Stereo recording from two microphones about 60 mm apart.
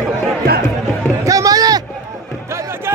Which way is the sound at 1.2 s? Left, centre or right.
Right.